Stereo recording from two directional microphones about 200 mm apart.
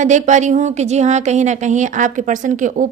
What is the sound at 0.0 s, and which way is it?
A woman's voice, 35° right (ahead or behind).